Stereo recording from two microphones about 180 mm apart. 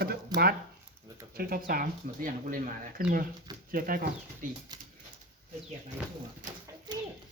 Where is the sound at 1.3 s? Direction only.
55° right (ahead or behind).